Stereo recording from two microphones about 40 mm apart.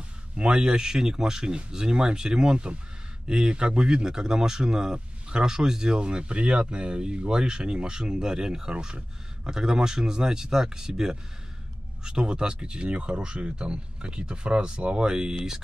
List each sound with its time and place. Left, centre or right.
0.4 s speech: right